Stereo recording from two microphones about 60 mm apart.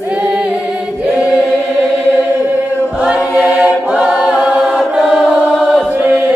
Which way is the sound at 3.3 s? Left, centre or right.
Centre.